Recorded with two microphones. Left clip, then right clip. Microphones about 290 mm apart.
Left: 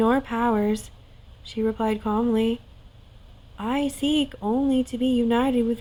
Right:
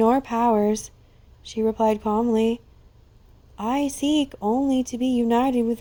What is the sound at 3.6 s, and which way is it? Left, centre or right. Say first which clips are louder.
Speech: right 2 dB; right.